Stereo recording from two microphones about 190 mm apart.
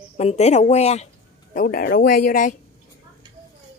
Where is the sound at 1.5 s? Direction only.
50° left (ahead or behind).